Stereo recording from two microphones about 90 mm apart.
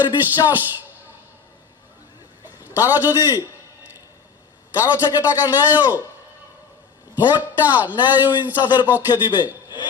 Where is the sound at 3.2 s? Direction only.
20° right (ahead or behind).